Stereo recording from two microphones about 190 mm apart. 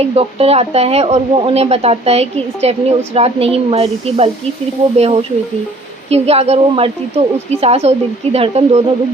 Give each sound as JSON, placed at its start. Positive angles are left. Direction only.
{"t": 0.0, "sound": "speech", "side_deg": -30}